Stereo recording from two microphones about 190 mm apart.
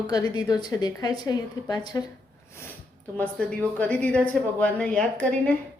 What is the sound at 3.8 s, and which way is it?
Speech, 5° left (ahead or behind).